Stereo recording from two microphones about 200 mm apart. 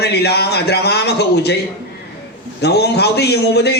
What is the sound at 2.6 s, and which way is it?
A man's voice, 55° left (ahead or behind).